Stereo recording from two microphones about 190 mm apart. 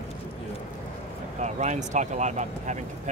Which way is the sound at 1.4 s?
40° right (ahead or behind).